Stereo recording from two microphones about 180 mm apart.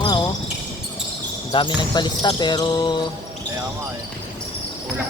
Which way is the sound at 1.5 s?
25° left (ahead or behind).